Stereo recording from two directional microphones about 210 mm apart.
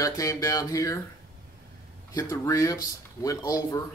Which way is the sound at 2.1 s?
15° left (ahead or behind).